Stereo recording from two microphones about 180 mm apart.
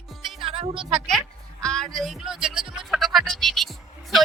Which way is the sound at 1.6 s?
5° left (ahead or behind).